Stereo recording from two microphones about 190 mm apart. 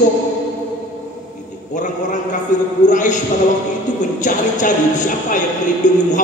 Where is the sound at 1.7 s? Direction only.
40° left (ahead or behind).